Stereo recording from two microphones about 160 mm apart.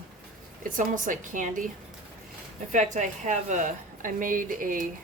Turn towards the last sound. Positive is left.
turn(degrees=-55)  # may be behind; listen again after turning